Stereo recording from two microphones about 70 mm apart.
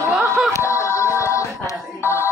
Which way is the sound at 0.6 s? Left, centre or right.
Left.